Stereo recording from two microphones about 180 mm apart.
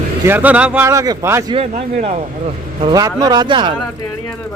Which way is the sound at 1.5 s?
35° right (ahead or behind).